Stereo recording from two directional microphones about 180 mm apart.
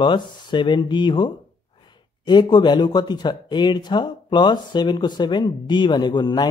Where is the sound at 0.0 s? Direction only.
25° left (ahead or behind).